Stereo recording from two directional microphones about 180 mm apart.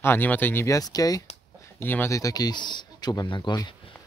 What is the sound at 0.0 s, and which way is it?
Speech, 10° left (ahead or behind).